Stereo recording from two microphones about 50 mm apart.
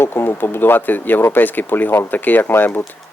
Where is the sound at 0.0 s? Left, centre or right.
Left.